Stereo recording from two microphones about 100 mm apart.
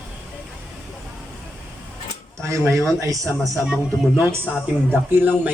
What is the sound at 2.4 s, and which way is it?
Speech, 30° right (ahead or behind).